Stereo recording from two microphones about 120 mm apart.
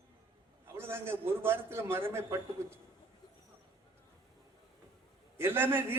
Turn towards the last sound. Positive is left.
turn(degrees=-20)  # may be behind; listen again after turning